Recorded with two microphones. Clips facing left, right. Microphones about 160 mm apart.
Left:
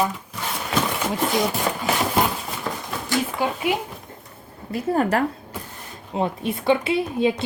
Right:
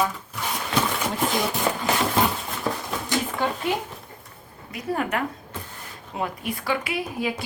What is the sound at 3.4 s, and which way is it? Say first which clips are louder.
Speech: left 2 dB; 10° left (ahead or behind).